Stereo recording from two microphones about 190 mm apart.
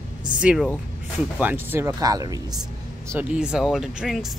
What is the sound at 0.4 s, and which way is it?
Speech, 5° right (ahead or behind).